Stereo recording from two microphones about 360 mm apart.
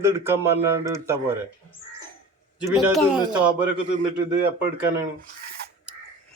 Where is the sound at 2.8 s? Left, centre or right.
Centre.